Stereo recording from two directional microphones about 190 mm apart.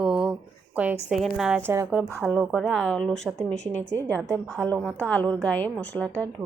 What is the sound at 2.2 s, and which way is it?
A woman's voice, 5° left (ahead or behind).